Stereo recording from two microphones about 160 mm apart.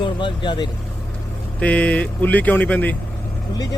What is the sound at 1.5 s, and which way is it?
Speech, 10° left (ahead or behind).